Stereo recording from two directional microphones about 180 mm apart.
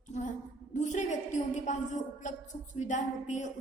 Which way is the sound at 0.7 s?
40° left (ahead or behind).